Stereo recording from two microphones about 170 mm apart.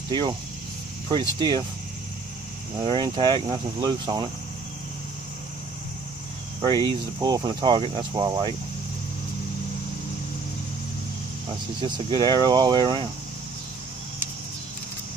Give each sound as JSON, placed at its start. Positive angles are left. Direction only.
{"t": 0.1, "sound": "speech", "side_deg": -25}
{"t": 2.8, "sound": "speech", "side_deg": -30}
{"t": 6.6, "sound": "speech", "side_deg": -25}
{"t": 11.8, "sound": "speech", "side_deg": -25}